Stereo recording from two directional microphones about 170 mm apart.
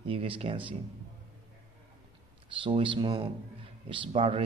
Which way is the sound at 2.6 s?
30° right (ahead or behind).